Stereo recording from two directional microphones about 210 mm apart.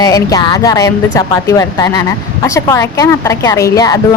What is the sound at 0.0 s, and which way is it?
Speech, 15° left (ahead or behind).